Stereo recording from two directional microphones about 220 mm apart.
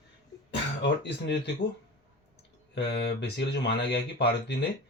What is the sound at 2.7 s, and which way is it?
Speech, 50° left (ahead or behind).